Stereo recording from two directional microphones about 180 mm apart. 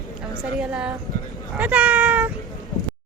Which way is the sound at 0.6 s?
5° right (ahead or behind).